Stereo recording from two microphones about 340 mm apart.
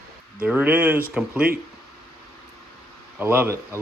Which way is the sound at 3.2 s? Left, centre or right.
Centre.